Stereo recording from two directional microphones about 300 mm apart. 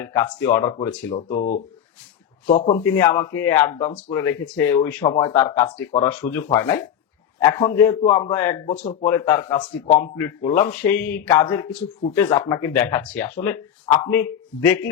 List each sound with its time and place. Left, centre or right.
0.0 s speech: centre
1.3 s speech: left
2.7 s a man's voice: centre
8.8 s speech: left
9.0 s speech: centre